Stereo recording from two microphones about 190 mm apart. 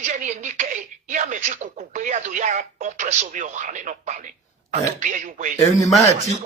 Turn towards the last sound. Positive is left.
turn(degrees=35)  # may be behind; listen again after turning